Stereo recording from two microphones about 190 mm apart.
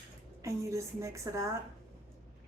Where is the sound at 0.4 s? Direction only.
15° right (ahead or behind).